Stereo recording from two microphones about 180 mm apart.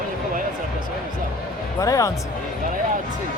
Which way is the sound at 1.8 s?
20° left (ahead or behind).